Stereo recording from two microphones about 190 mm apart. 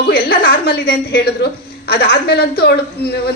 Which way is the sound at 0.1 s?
55° left (ahead or behind).